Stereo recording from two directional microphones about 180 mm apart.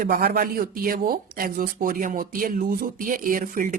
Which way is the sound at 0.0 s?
55° right (ahead or behind).